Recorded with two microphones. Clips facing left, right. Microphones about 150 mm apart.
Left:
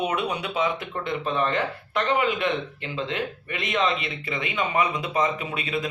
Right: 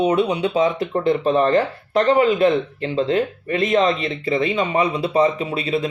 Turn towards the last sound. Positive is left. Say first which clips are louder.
# right 7 dB
turn(degrees=-30)  # may be behind; listen again after turning